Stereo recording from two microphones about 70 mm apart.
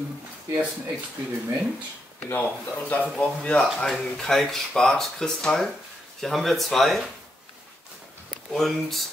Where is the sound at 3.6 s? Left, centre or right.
Centre.